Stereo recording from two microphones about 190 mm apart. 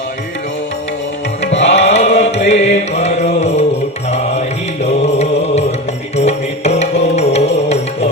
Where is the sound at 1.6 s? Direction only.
35° left (ahead or behind).